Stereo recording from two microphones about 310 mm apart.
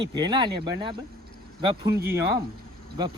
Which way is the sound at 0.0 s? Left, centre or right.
Centre.